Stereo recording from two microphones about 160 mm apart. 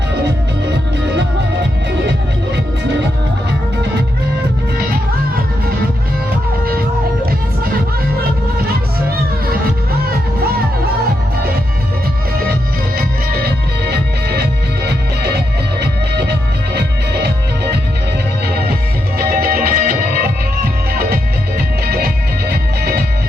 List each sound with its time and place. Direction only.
0.7 s music: 90° right
7.3 s music: 75° right (ahead or behind)
9.5 s music: 70° right (ahead or behind)
13.0 s music: 85° right
18.4 s music: 80° right